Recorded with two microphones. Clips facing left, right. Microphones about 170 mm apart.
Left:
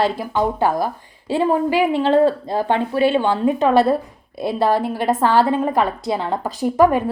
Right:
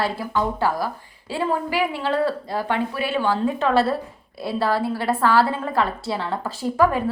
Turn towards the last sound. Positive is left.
turn(degrees=20)  # may be behind; listen again after turning